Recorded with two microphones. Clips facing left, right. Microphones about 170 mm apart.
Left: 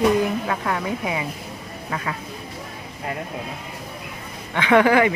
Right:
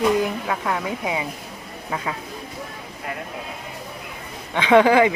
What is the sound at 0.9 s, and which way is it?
Speech, 20° right (ahead or behind).